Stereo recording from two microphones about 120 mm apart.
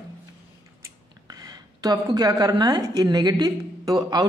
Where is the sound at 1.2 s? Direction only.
30° right (ahead or behind).